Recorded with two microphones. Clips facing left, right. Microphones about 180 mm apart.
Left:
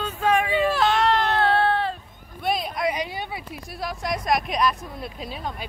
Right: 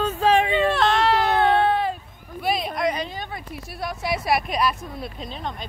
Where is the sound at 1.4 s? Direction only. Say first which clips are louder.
Right 2 dB; 15° right (ahead or behind).